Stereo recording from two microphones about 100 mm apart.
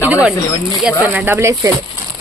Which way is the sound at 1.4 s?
30° right (ahead or behind).